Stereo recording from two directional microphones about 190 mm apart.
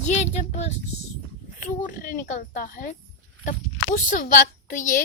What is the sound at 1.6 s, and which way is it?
Speech, 45° left (ahead or behind).